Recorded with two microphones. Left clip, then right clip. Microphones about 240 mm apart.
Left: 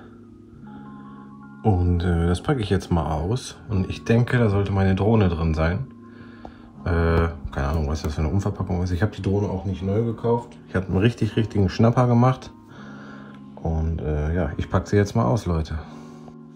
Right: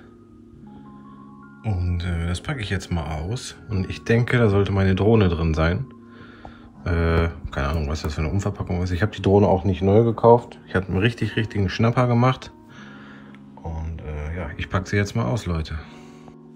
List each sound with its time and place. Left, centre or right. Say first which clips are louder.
1.6 s speech: left 9 dB; centre
6.8 s speech: left 1 dB; centre
9.6 s speech: right 8 dB; centre
10.7 s speech: right 1 dB; centre
13.7 s a sound: left 9 dB; left
14.7 s speech: left 2 dB; centre